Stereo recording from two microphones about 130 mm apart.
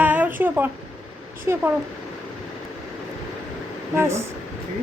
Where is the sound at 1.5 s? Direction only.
20° right (ahead or behind).